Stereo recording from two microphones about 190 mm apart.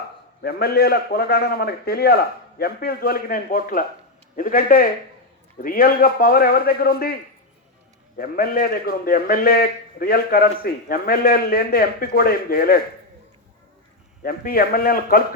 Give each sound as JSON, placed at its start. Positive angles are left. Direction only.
{"t": 0.4, "sound": "a man's voice", "side_deg": 55}
{"t": 8.2, "sound": "a man's voice", "side_deg": 50}
{"t": 14.2, "sound": "a man's voice", "side_deg": 50}